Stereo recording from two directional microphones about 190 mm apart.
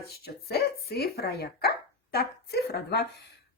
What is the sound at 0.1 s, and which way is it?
Speech, 55° left (ahead or behind).